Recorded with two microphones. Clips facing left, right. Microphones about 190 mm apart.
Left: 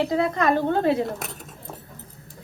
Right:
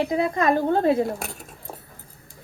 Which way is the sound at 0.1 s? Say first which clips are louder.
Even; 20° right (ahead or behind).